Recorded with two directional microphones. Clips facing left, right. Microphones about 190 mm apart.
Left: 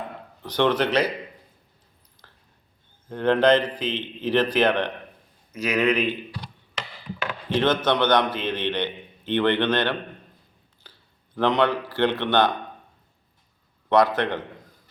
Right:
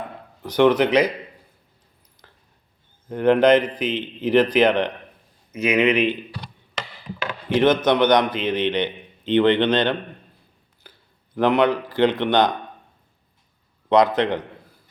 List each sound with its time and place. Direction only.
0.4 s a man's voice: 10° right (ahead or behind)
2.2 s a sound: 15° right (ahead or behind)
3.1 s a man's voice: 15° right (ahead or behind)
7.5 s a man's voice: 10° right (ahead or behind)
11.3 s a man's voice: 10° right (ahead or behind)
13.9 s a man's voice: 15° right (ahead or behind)